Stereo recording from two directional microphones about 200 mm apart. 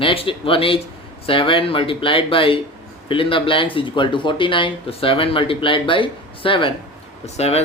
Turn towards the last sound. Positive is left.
turn(degrees=30)  # may be behind; listen again after turning